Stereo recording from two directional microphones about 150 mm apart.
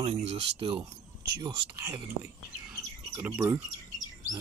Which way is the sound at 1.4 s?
25° right (ahead or behind).